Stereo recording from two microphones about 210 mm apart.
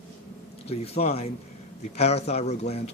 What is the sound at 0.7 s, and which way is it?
Speech, 30° left (ahead or behind).